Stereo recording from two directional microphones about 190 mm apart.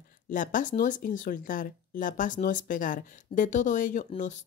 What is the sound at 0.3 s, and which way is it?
Speech, 45° left (ahead or behind).